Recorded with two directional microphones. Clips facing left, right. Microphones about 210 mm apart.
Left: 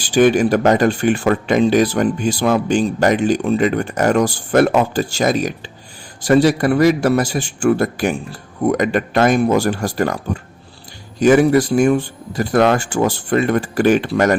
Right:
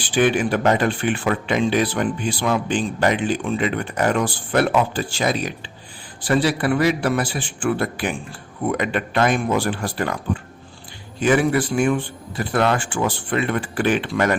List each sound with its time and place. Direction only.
0.1 s speech: 40° left (ahead or behind)